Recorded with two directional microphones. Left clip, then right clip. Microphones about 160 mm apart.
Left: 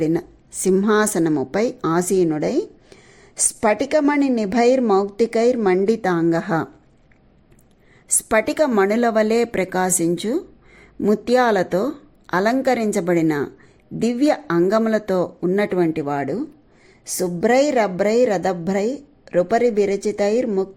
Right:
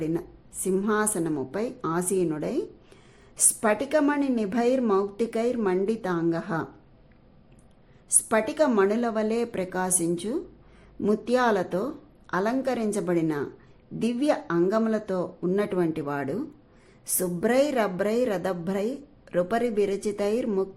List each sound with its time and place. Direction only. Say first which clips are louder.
0.0 s a woman's voice: left 9 dB; 35° left (ahead or behind)
8.3 s a woman's voice: left 6 dB; 30° left (ahead or behind)